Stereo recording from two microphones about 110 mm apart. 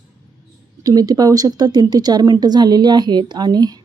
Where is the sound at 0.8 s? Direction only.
35° right (ahead or behind).